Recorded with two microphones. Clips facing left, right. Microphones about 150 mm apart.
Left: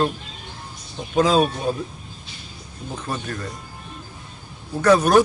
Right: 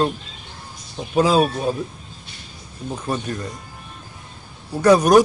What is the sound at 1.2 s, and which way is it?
Speech, 5° right (ahead or behind).